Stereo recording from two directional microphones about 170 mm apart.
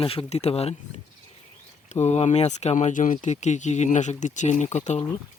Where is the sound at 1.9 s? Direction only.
40° left (ahead or behind).